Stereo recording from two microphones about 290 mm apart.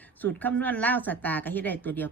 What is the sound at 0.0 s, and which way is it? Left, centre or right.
Speech, centre.